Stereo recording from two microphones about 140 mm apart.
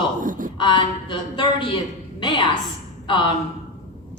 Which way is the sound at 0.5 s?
35° left (ahead or behind).